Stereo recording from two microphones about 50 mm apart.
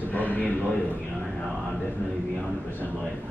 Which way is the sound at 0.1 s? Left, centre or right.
Left.